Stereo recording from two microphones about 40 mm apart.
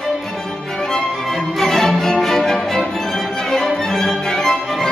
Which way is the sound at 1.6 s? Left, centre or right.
Centre.